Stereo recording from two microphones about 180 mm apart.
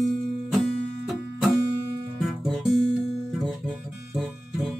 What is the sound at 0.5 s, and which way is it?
Music, centre (ahead or behind).